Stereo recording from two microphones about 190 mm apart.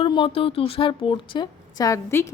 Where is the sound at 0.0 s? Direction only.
30° left (ahead or behind).